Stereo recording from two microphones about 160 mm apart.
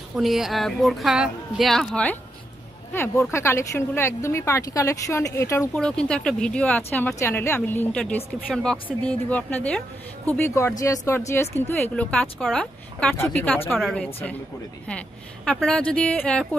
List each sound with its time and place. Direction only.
0.1 s speech: centre (ahead or behind); by 5.7 s 20° left (ahead or behind)
5.8 s speech: 5° left (ahead or behind)
13.7 s speech: centre (ahead or behind)